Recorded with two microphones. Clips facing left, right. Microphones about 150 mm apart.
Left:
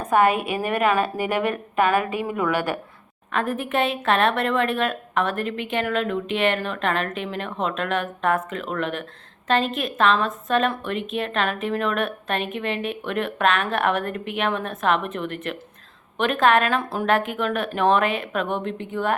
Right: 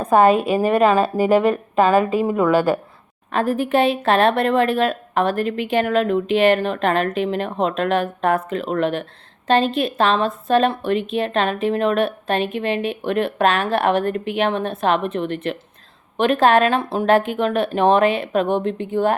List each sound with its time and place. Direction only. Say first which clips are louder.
0.0 s a woman's voice: right 5 dB; 35° right (ahead or behind)